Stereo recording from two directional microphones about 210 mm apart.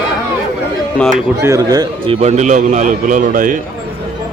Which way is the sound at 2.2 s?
35° right (ahead or behind).